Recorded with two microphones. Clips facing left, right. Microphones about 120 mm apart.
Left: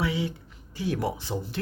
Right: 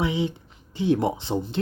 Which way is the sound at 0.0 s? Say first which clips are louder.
Right 3 dB; 20° right (ahead or behind).